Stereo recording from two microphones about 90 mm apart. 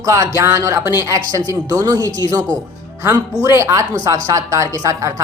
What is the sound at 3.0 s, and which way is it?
A woman's voice, 35° right (ahead or behind).